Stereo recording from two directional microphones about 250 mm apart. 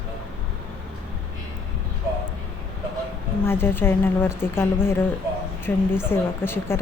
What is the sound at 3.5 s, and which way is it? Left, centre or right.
A woman's voice, centre.